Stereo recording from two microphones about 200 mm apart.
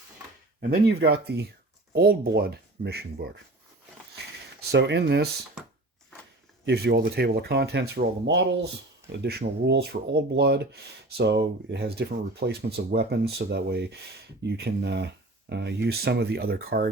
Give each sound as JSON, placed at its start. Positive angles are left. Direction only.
{"t": 0.6, "sound": "speech", "side_deg": -50}
{"t": 4.7, "sound": "speech", "side_deg": -60}
{"t": 6.7, "sound": "speech", "side_deg": -55}